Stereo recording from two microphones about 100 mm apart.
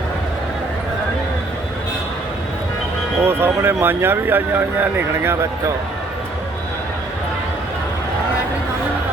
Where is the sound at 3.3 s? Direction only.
20° right (ahead or behind).